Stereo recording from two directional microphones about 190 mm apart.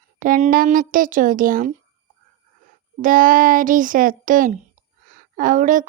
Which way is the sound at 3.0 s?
45° right (ahead or behind).